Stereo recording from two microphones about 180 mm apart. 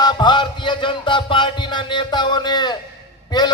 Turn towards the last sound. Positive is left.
turn(degrees=25)  # may be behind; listen again after turning